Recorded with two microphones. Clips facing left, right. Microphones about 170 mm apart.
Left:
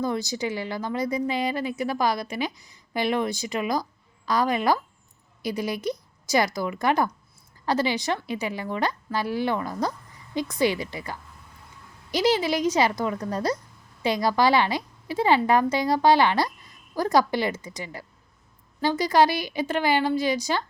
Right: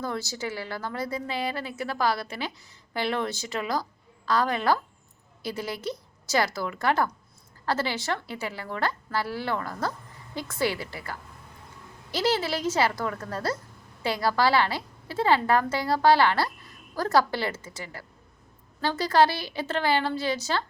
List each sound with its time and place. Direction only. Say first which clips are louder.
0.0 s a woman's voice: left 5 dB; 15° left (ahead or behind)